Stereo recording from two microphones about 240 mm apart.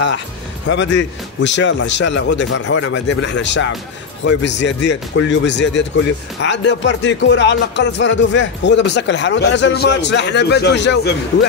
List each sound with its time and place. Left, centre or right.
0.7 s speech: left